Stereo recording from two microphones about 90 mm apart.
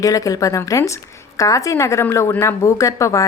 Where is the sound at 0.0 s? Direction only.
40° left (ahead or behind).